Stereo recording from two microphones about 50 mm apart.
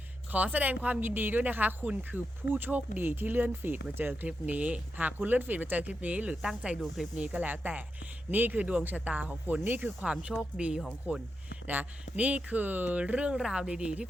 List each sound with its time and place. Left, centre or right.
0.3 s speech: right
6.4 s speech: centre
7.3 s speech: right
9.0 s speech: right
9.6 s speech: right
10.0 s speech: centre
13.3 s speech: centre
13.7 s speech: right